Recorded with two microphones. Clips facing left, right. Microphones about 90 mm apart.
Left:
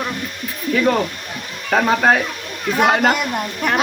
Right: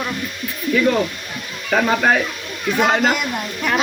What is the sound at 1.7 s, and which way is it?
A man's voice, 45° left (ahead or behind).